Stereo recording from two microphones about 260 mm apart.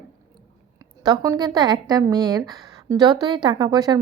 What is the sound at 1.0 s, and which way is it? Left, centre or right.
A woman's voice, centre.